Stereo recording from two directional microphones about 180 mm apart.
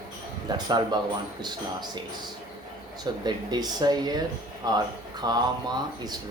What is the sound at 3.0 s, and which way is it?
Speech, 20° right (ahead or behind).